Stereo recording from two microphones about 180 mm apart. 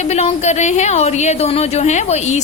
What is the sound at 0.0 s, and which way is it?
A woman's voice, 40° left (ahead or behind).